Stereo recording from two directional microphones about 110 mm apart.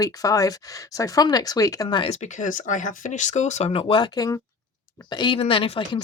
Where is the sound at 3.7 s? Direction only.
55° left (ahead or behind).